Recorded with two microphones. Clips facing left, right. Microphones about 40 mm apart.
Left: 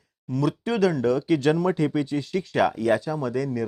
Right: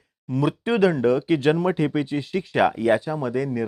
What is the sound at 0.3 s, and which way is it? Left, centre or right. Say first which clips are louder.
Speech: right 2 dB; right.